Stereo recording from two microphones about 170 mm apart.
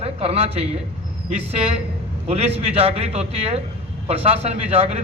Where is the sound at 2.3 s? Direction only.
40° right (ahead or behind).